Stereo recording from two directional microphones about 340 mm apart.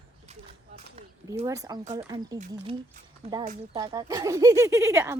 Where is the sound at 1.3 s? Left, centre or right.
Centre.